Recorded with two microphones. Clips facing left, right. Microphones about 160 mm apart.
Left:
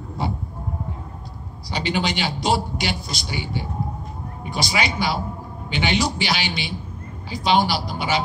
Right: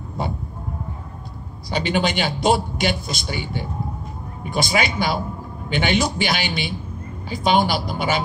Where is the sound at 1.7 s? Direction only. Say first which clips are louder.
Right 3 dB; 50° right (ahead or behind).